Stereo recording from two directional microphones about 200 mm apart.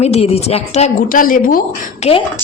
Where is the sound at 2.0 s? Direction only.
35° left (ahead or behind).